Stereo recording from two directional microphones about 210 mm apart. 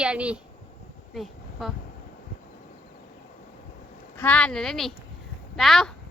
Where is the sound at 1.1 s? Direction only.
Centre (ahead or behind).